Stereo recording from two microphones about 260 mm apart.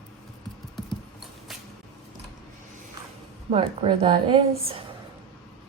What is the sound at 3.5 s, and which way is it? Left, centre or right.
Speech, centre.